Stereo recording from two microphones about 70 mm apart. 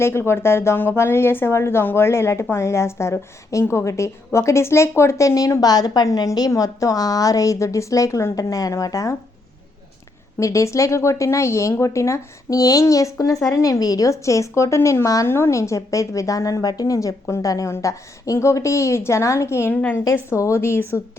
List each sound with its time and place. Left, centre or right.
0.0 s a woman's voice: left
6.5 s speech: left
10.4 s speech: left
15.0 s speech: left
15.3 s a woman's voice: left